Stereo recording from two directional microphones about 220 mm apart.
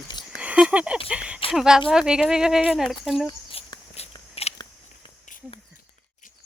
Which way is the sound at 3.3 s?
25° left (ahead or behind).